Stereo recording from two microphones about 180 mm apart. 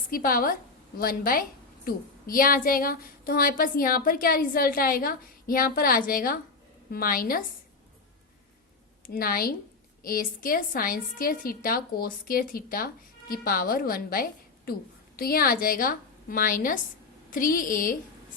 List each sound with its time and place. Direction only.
0.1 s a woman's voice: 50° left (ahead or behind)
9.0 s a woman's voice: 55° left (ahead or behind)